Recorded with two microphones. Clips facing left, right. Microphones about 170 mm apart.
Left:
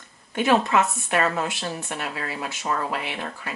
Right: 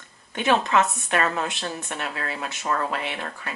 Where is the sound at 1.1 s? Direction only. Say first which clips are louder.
Left 1 dB; 15° left (ahead or behind).